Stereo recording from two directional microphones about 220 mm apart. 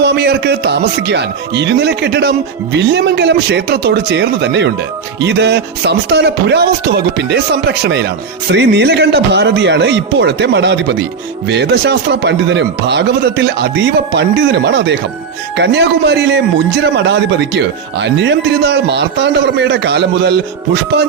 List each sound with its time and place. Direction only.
0.0 s speech: 50° right (ahead or behind)